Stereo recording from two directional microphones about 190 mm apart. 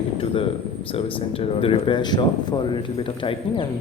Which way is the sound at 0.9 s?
30° left (ahead or behind).